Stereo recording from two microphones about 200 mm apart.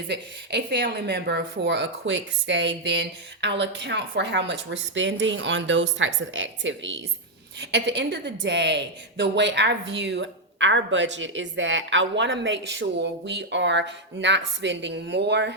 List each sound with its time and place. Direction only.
0.1 s a woman's voice: 55° right (ahead or behind)